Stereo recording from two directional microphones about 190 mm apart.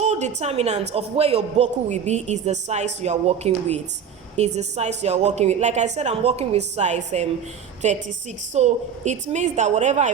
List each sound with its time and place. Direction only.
0.0 s a man's voice: 35° right (ahead or behind)